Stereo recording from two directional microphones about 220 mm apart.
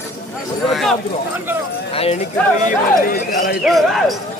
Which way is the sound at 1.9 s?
25° left (ahead or behind).